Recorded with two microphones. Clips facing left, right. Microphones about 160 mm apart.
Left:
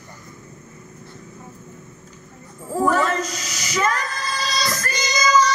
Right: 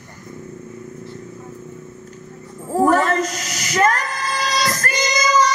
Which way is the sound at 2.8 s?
50° right (ahead or behind).